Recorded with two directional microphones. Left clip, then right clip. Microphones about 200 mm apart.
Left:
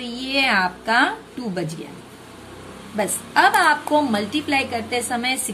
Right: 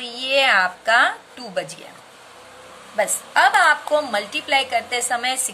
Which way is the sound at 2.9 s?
20° right (ahead or behind).